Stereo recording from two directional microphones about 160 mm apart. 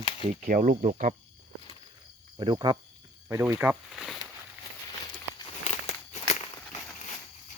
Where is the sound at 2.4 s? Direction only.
30° right (ahead or behind).